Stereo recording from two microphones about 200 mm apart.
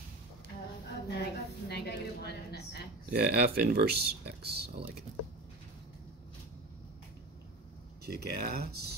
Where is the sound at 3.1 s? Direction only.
50° right (ahead or behind).